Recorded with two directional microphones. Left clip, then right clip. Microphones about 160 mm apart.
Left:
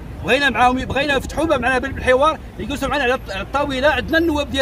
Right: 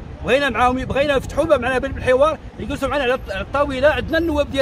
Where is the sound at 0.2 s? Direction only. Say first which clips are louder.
Left 1 dB; 10° right (ahead or behind).